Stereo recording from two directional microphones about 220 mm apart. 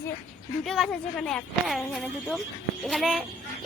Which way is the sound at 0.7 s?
Centre (ahead or behind).